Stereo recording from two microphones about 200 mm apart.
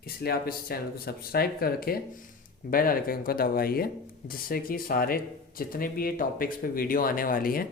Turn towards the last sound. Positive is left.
turn(degrees=45)  # may be behind; listen again after turning